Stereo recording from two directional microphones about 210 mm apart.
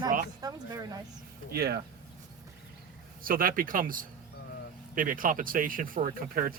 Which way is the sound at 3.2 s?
45° right (ahead or behind).